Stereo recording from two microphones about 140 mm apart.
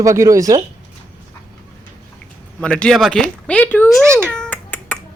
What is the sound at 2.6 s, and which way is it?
A child's voice, 5° left (ahead or behind).